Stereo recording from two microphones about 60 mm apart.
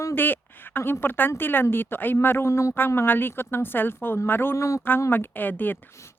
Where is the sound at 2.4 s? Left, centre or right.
Left.